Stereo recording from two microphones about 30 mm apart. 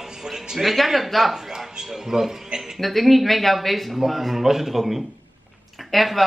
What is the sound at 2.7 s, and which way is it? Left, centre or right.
Speech, centre.